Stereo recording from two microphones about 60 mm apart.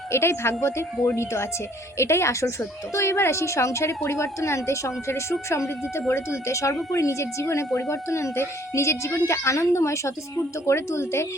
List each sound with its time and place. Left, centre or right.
0.1 s speech: left